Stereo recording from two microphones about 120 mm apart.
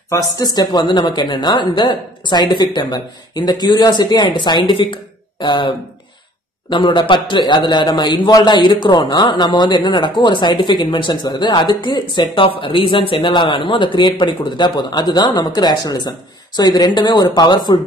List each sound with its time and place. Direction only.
0.1 s a woman's voice: 30° left (ahead or behind)